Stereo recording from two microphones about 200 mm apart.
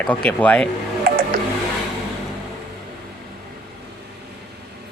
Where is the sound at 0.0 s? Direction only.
5° left (ahead or behind).